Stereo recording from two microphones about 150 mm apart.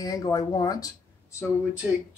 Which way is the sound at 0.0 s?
25° left (ahead or behind).